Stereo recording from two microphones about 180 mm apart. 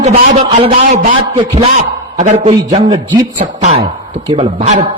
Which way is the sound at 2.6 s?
20° right (ahead or behind).